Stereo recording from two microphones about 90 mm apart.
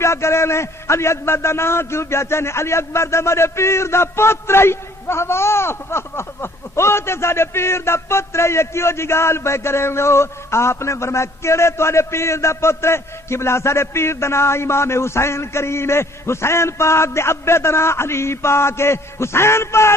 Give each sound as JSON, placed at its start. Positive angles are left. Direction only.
{"t": 0.0, "sound": "a man's voice", "side_deg": 30}